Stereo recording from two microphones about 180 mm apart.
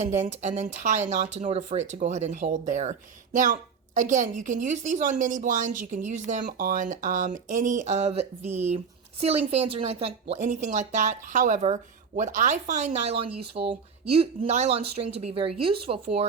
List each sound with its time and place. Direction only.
0.0 s a woman's voice: 40° right (ahead or behind)
8.4 s speech: 10° right (ahead or behind)
9.5 s speech: 35° right (ahead or behind)